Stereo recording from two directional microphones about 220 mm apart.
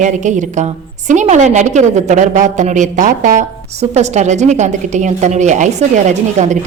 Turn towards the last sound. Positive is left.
turn(degrees=-35)  # may be behind; listen again after turning